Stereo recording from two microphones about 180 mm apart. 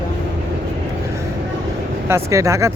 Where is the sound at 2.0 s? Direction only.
15° right (ahead or behind).